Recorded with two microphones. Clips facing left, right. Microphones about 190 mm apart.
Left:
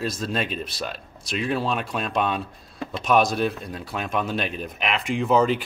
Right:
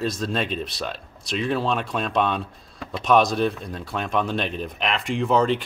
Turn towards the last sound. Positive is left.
turn(degrees=5)  # may be behind; listen again after turning